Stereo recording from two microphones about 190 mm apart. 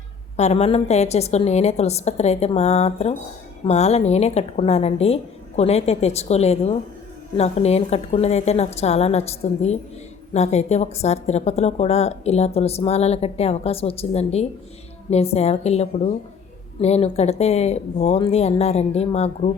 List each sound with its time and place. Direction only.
0.3 s speech: 35° left (ahead or behind)